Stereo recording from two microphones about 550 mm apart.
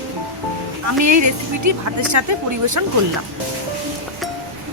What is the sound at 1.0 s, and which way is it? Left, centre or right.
Speech, right.